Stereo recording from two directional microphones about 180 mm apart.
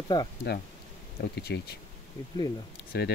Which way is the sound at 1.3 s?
65° left (ahead or behind).